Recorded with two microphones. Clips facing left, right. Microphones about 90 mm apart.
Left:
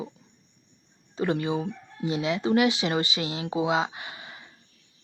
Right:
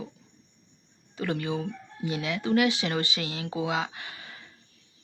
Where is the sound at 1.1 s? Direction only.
25° left (ahead or behind).